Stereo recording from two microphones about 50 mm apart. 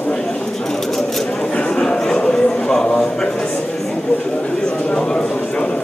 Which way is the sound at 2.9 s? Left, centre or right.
Centre.